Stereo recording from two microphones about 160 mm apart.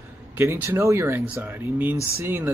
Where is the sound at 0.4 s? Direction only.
15° right (ahead or behind).